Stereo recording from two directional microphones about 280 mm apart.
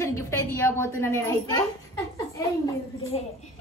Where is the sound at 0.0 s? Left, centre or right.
Centre.